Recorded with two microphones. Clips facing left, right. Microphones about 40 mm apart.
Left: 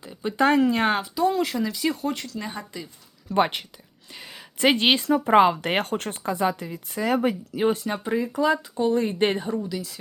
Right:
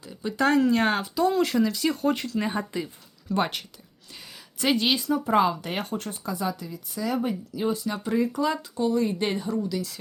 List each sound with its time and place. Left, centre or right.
0.0 s speech: left; by 2.3 s centre
2.3 s speech: centre
3.2 s speech: left
4.6 s speech: left
5.6 s speech: left
7.2 s speech: left
7.9 s speech: left
8.2 s speech: centre
8.7 s speech: left
9.6 s speech: centre